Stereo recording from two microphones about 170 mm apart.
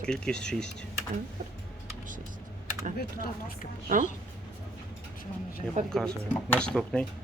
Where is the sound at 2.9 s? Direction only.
60° left (ahead or behind).